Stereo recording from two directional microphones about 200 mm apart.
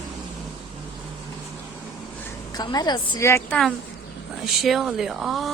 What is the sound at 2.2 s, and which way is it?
A woman's voice, 20° left (ahead or behind).